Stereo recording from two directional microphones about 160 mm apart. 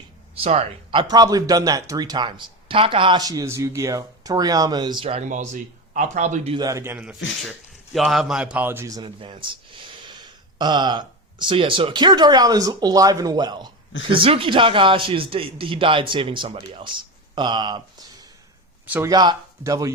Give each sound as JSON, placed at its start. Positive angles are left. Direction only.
{"t": 0.3, "sound": "a man's voice", "side_deg": -40}
{"t": 5.2, "sound": "a man's voice", "side_deg": -50}
{"t": 6.5, "sound": "a man's voice", "side_deg": -25}
{"t": 18.9, "sound": "speech", "side_deg": -10}
{"t": 19.1, "sound": "a man's voice", "side_deg": -25}